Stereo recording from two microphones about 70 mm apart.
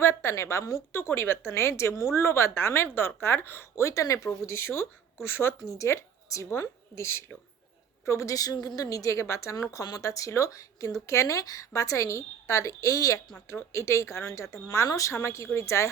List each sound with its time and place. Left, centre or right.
0.0 s a woman's voice: left
13.5 s speech: left